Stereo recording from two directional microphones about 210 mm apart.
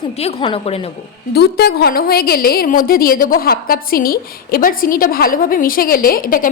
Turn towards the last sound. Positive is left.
turn(degrees=40)  # may be behind; listen again after turning